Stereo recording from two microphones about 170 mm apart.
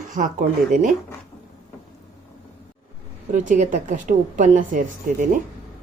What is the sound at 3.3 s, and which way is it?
A woman's voice, 45° right (ahead or behind).